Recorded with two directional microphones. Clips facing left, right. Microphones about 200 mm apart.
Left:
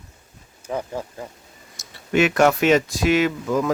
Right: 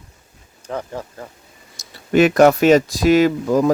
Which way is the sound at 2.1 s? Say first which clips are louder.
Right 5 dB; 35° right (ahead or behind).